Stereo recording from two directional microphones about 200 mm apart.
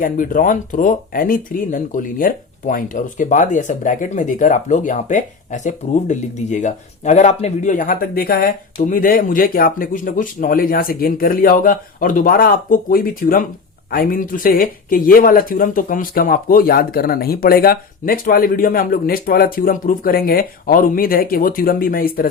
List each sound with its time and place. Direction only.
0.0 s speech: 40° left (ahead or behind)